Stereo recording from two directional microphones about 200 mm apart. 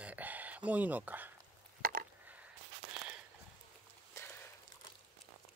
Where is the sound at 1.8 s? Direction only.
45° right (ahead or behind).